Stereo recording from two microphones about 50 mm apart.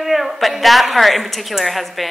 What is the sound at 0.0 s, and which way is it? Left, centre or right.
A woman's voice, centre.